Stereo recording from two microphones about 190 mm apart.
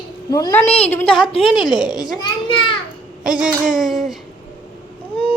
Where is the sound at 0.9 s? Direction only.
5° left (ahead or behind).